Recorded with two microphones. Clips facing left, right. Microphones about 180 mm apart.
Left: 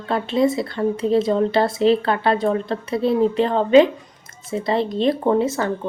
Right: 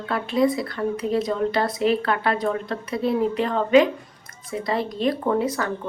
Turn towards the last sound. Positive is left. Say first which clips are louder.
# left 4 dB
turn(degrees=25)  # may be behind; listen again after turning